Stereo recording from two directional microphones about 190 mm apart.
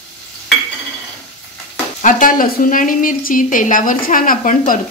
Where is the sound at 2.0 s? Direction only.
45° left (ahead or behind).